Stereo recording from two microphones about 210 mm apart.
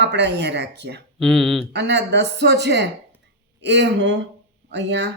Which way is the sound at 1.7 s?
55° right (ahead or behind).